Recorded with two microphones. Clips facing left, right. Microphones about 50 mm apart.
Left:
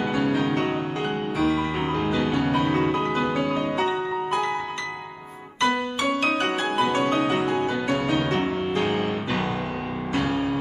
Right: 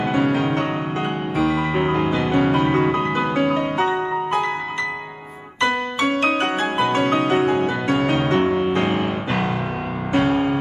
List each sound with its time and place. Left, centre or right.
0.4 s music: right
2.3 s music: right
2.6 s music: right
3.3 s music: right
6.0 s music: right
10.1 s music: right